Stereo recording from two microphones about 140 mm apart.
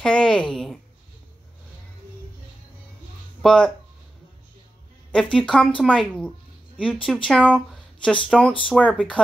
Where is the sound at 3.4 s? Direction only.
5° left (ahead or behind).